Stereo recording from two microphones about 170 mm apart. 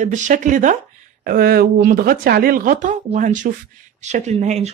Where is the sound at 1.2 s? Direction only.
60° right (ahead or behind); by 4.7 s 40° right (ahead or behind).